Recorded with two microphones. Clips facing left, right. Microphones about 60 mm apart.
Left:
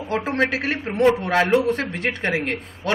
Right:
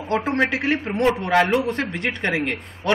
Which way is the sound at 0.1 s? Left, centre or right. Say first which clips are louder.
Right 1 dB; centre.